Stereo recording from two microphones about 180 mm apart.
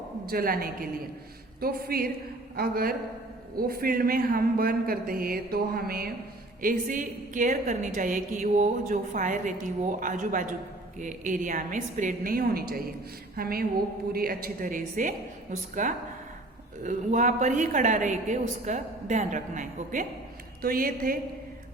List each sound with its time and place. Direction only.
0.3 s a man's voice: 55° right (ahead or behind)